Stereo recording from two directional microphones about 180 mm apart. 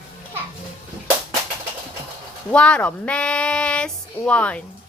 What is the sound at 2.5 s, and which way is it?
Speech, 5° left (ahead or behind).